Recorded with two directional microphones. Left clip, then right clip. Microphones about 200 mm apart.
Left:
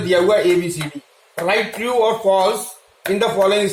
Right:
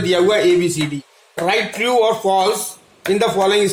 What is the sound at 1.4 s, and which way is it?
Speech, 55° right (ahead or behind).